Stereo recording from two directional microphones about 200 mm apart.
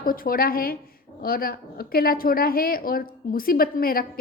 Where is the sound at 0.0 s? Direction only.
45° left (ahead or behind).